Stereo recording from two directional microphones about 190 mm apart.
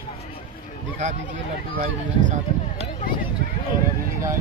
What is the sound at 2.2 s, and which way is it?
Speech, 40° right (ahead or behind).